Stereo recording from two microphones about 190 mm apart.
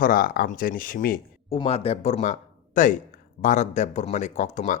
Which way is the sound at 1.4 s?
30° left (ahead or behind).